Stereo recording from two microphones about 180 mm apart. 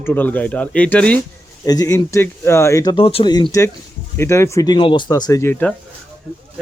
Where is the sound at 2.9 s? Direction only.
30° left (ahead or behind); by 5.7 s 10° left (ahead or behind).